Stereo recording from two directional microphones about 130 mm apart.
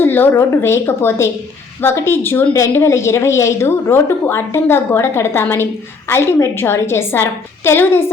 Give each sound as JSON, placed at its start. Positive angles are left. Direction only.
{"t": 0.0, "sound": "a woman's voice", "side_deg": 15}